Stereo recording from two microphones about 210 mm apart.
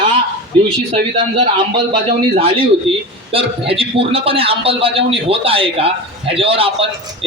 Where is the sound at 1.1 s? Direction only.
20° right (ahead or behind).